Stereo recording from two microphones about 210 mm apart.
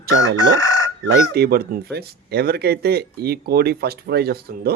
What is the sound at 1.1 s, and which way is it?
Speech, 50° right (ahead or behind).